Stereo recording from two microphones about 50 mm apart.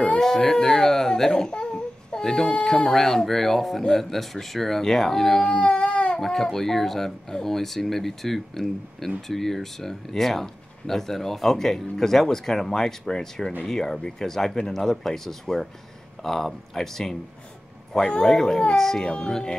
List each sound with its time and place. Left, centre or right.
0.2 s speech: centre
5.5 s baby cry: left
6.1 s speech: centre